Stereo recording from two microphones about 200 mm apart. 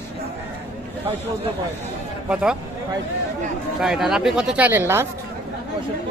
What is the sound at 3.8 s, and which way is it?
Speech, centre (ahead or behind).